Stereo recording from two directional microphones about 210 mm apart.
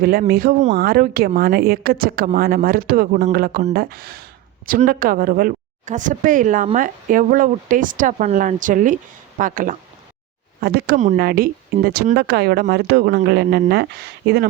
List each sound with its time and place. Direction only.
0.0 s speech: 45° right (ahead or behind)